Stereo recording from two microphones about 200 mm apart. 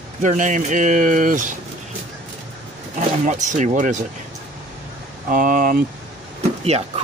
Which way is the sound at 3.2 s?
40° right (ahead or behind).